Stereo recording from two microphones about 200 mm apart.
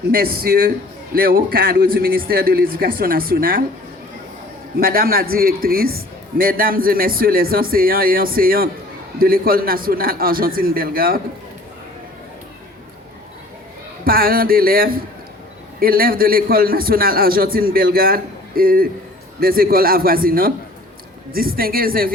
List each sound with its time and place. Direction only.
0.1 s a man's voice: 50° right (ahead or behind)
4.8 s a man's voice: 45° right (ahead or behind)
14.0 s a man's voice: 45° right (ahead or behind)